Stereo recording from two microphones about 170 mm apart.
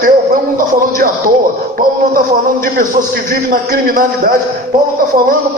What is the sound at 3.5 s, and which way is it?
Speech, 55° right (ahead or behind).